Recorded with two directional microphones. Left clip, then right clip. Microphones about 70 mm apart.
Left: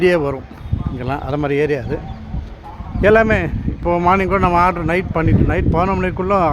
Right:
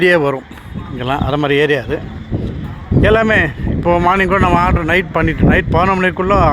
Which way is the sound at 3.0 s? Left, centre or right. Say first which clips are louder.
Right 1 dB; centre.